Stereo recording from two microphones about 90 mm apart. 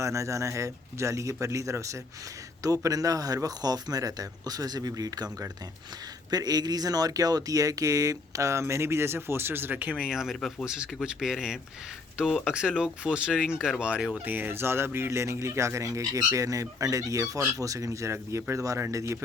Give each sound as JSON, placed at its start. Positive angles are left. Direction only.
{"t": 0.0, "sound": "a man's voice", "side_deg": -35}
{"t": 14.3, "sound": "speech", "side_deg": -20}